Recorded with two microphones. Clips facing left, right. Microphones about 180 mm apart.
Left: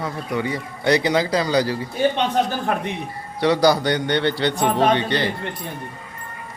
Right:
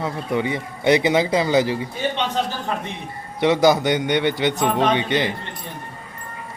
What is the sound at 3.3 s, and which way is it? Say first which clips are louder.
A man's voice: right 1 dB; 20° right (ahead or behind).